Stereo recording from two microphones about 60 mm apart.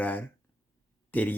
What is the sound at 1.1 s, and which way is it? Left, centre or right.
Speech, left.